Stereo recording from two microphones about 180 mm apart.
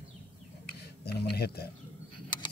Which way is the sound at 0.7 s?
65° left (ahead or behind).